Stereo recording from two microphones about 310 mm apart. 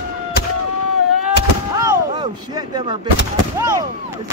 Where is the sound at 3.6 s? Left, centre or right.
Centre.